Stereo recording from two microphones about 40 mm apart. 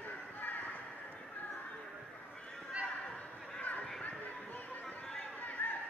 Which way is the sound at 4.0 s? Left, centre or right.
Left.